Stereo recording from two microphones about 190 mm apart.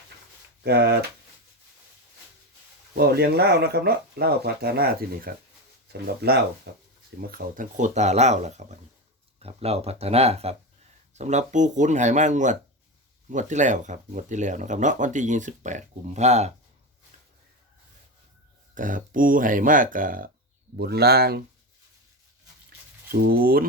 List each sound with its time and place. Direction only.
0.6 s speech: 60° right (ahead or behind)
3.0 s speech: 55° right (ahead or behind)
7.2 s speech: 50° right (ahead or behind)
18.7 s speech: 45° right (ahead or behind)
20.7 s speech: 60° right (ahead or behind)
23.1 s speech: 50° right (ahead or behind)